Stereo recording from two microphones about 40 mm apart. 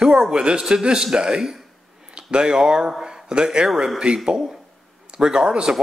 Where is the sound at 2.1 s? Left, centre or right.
Right.